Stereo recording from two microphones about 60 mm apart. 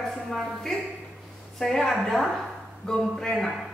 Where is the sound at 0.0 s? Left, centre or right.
Centre.